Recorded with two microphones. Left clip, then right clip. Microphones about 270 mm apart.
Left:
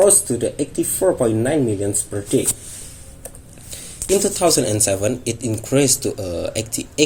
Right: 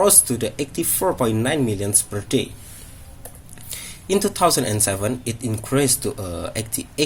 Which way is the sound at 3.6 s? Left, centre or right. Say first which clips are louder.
Left 4 dB; right.